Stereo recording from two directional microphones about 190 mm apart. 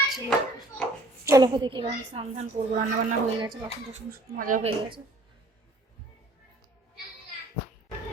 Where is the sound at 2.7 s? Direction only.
40° right (ahead or behind).